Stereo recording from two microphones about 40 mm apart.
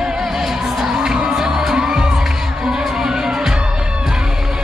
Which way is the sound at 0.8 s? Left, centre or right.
Centre.